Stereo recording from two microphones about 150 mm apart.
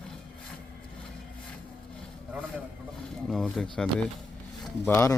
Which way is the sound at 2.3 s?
10° right (ahead or behind).